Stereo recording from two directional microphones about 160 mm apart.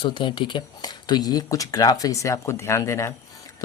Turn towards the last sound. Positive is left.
turn(degrees=20)  # may be behind; listen again after turning